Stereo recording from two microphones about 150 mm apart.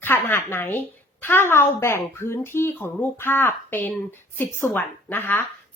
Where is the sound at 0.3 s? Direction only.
15° left (ahead or behind).